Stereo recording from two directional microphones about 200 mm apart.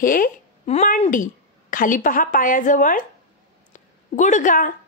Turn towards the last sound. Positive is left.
turn(degrees=40)  # may be behind; listen again after turning